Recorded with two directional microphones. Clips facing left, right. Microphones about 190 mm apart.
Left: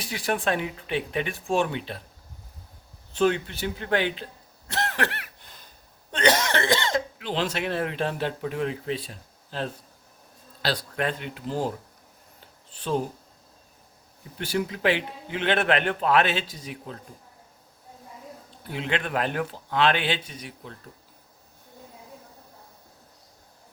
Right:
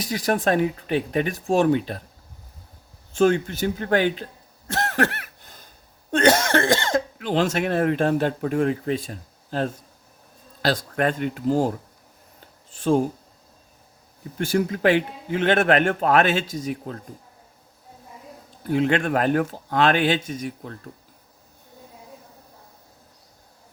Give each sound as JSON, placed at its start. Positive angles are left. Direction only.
{"t": 0.0, "sound": "speech", "side_deg": -40}
{"t": 3.1, "sound": "speech", "side_deg": -45}
{"t": 4.7, "sound": "cough", "side_deg": -45}
{"t": 6.1, "sound": "speech", "side_deg": -45}
{"t": 12.7, "sound": "speech", "side_deg": -45}
{"t": 14.3, "sound": "speech", "side_deg": -45}
{"t": 18.6, "sound": "speech", "side_deg": -45}